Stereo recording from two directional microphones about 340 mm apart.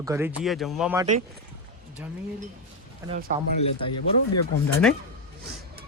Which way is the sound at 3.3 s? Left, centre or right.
Right.